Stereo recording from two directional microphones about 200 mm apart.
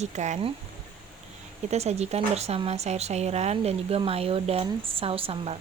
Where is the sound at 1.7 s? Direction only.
35° right (ahead or behind).